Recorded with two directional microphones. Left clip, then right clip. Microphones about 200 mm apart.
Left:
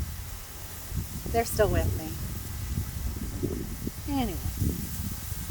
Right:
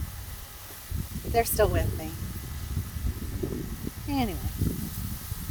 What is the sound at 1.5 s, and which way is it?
Speech, 35° right (ahead or behind).